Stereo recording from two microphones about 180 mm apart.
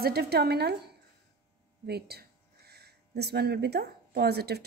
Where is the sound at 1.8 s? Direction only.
65° right (ahead or behind).